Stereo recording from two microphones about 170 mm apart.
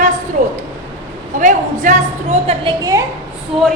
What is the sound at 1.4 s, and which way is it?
A woman's voice, 50° right (ahead or behind).